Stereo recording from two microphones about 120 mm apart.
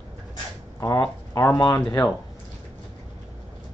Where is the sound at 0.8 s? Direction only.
20° left (ahead or behind).